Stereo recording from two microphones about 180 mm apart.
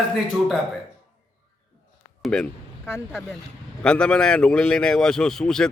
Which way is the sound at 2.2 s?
5° left (ahead or behind).